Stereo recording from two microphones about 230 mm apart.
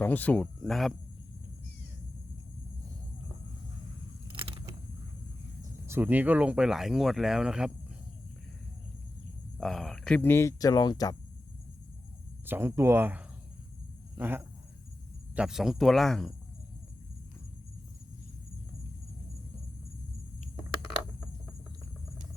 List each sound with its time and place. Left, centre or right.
0.0 s speech: centre
4.3 s a sound: right
5.8 s speech: centre
9.6 s speech: centre
12.5 s speech: centre